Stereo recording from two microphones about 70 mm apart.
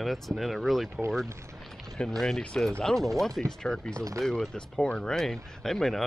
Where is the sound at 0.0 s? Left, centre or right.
Centre.